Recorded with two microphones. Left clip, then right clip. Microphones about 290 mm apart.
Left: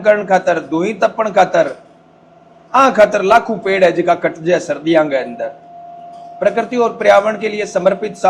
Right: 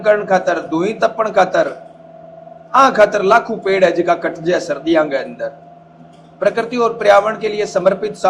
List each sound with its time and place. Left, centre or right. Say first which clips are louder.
0.0 s a man's voice: left 1 dB; left
2.7 s a man's voice: left 1 dB; left